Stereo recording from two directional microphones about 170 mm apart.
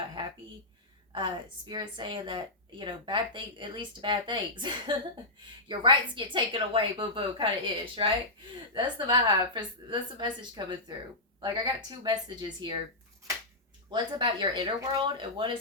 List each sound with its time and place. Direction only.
1.1 s a woman's voice: 30° right (ahead or behind)
13.9 s a woman's voice: 30° right (ahead or behind)